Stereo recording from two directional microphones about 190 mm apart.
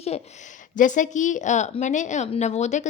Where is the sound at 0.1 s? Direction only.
35° left (ahead or behind).